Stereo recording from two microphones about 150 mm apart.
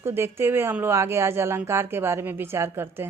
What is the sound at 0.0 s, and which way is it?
Speech, 15° right (ahead or behind).